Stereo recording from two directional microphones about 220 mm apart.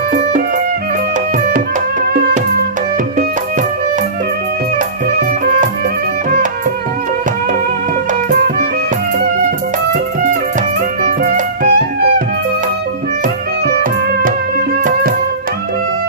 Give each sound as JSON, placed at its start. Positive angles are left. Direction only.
{"t": 0.1, "sound": "music", "side_deg": -35}
{"t": 8.3, "sound": "music", "side_deg": -40}
{"t": 11.0, "sound": "music", "side_deg": -35}